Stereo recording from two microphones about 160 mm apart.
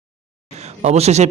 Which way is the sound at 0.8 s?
40° right (ahead or behind).